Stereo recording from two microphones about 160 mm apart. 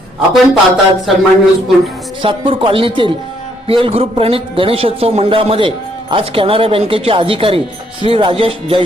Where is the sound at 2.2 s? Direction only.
30° right (ahead or behind).